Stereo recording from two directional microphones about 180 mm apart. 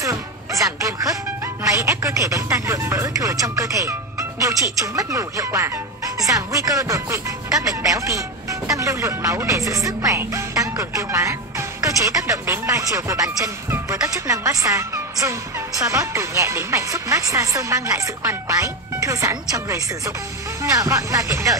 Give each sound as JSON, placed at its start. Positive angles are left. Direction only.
{"t": 0.0, "sound": "speech", "side_deg": -15}